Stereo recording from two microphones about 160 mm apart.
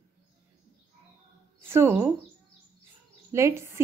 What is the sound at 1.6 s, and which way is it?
Speech, 15° right (ahead or behind).